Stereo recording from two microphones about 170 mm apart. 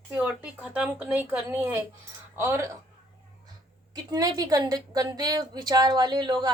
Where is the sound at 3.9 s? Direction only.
20° right (ahead or behind).